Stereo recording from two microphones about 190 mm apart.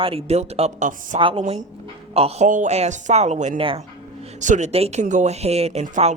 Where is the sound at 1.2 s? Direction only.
30° right (ahead or behind).